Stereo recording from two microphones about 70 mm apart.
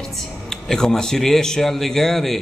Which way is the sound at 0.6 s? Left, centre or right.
Centre.